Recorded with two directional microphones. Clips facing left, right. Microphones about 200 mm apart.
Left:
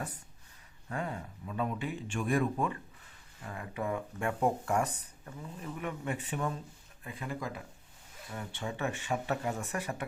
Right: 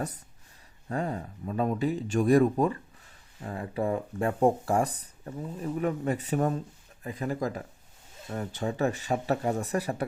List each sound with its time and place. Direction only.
0.9 s speech: 35° right (ahead or behind)